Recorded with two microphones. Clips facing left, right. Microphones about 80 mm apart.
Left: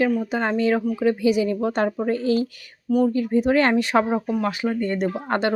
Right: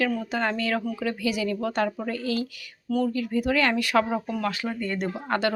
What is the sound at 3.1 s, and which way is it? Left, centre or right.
Speech, left.